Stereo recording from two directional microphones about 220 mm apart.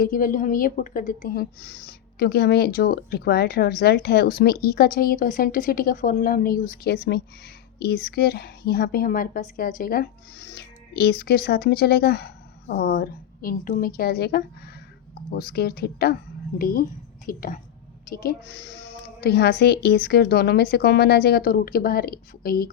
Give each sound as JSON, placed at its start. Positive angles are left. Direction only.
{"t": 0.0, "sound": "a woman's voice", "side_deg": 40}